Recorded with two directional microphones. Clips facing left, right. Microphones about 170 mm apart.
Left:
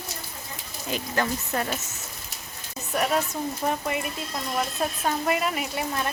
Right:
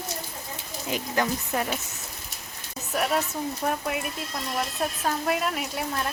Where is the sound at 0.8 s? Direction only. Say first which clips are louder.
Even; 15° right (ahead or behind).